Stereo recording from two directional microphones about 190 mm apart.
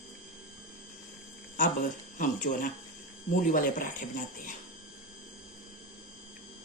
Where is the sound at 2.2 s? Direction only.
45° left (ahead or behind).